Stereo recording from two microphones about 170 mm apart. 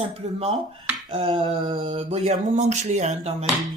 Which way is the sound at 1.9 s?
40° right (ahead or behind).